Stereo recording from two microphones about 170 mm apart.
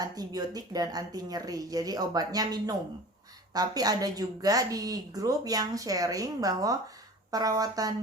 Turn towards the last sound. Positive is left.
turn(degrees=-20)  # may be behind; listen again after turning